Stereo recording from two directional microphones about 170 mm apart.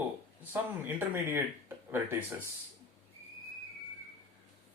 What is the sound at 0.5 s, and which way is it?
Speech, 10° right (ahead or behind).